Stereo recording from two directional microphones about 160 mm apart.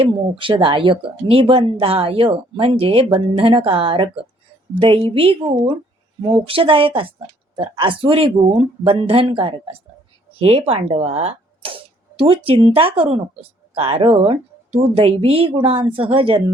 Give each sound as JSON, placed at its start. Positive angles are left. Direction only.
{"t": 0.0, "sound": "a woman's voice", "side_deg": -30}